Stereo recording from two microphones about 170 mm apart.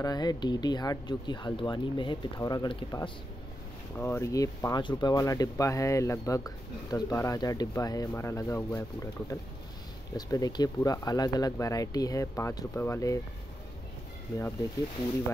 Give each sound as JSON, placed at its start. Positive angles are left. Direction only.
{"t": 0.0, "sound": "speech", "side_deg": 25}